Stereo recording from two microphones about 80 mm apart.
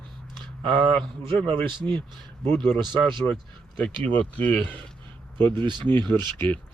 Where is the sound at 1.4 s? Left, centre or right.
Right.